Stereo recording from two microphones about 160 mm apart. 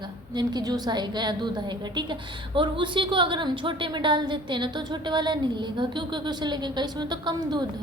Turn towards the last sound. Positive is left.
turn(degrees=-25)  # may be behind; listen again after turning